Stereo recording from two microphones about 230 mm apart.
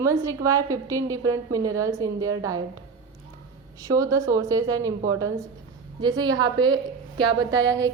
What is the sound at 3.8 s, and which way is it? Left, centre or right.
A woman's voice, centre.